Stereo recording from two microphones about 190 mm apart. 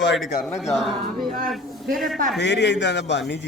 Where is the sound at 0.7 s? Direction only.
Centre (ahead or behind).